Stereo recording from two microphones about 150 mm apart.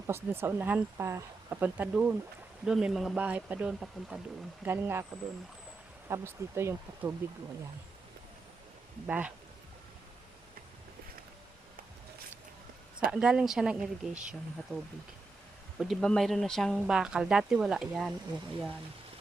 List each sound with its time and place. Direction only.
0.1 s speech: 15° right (ahead or behind)
4.6 s speech: 15° right (ahead or behind)
6.1 s speech: 20° right (ahead or behind)
9.0 s speech: 10° right (ahead or behind)
13.1 s speech: 5° right (ahead or behind)
15.8 s speech: centre (ahead or behind)